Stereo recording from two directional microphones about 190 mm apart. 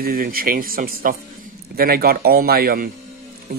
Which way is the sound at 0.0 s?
50° right (ahead or behind).